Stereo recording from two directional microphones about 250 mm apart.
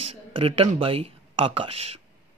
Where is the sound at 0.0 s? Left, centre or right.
Right.